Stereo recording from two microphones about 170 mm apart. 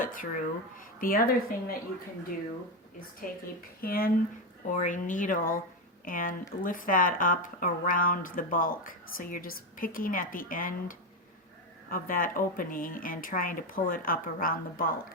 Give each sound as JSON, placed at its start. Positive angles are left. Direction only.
{"t": 0.0, "sound": "speech", "side_deg": 55}
{"t": 3.8, "sound": "speech", "side_deg": 60}
{"t": 4.7, "sound": "speech", "side_deg": 50}